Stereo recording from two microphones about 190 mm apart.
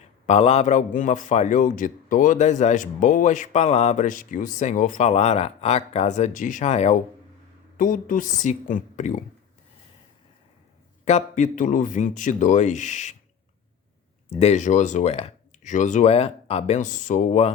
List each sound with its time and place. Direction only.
0.3 s a man's voice: 35° left (ahead or behind)
11.0 s a man's voice: 40° left (ahead or behind)
14.3 s a man's voice: 35° left (ahead or behind)